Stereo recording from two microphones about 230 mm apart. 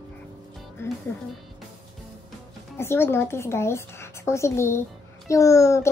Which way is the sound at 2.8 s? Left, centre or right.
Centre.